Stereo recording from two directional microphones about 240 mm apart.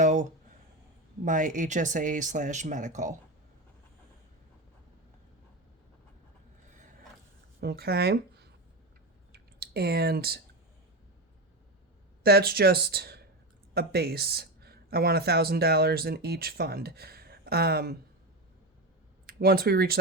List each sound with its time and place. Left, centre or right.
0.0 s a sound: right
1.2 s speech: right
7.6 s speech: right
9.3 s clicking: right
12.2 s speech: right
19.2 s speech: right